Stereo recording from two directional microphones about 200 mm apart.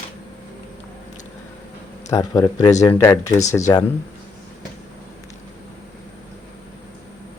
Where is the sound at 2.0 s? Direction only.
15° left (ahead or behind).